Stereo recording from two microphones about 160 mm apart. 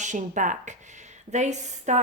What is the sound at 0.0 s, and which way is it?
A woman's voice, 50° right (ahead or behind).